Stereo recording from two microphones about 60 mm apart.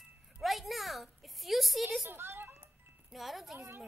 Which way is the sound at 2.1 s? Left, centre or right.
Right.